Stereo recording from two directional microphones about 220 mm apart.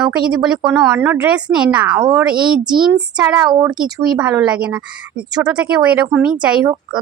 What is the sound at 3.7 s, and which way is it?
Speech, centre (ahead or behind).